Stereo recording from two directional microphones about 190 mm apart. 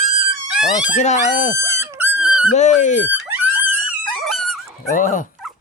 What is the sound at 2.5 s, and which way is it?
Speech, 40° left (ahead or behind).